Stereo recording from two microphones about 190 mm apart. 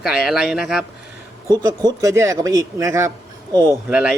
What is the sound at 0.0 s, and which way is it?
Speech, 5° right (ahead or behind).